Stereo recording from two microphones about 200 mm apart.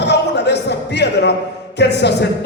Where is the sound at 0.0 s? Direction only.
60° left (ahead or behind).